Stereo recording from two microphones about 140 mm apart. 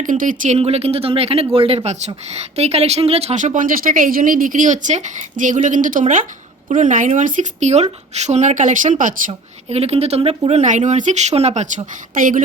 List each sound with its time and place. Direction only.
0.0 s speech: 70° right (ahead or behind)
0.6 s speech: 45° right (ahead or behind); by 9.3 s 70° right (ahead or behind)
9.6 s speech: 50° right (ahead or behind)